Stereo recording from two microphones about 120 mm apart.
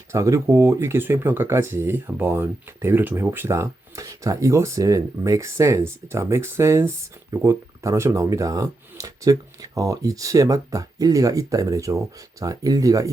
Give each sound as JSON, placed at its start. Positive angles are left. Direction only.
{"t": 0.1, "sound": "speech", "side_deg": -25}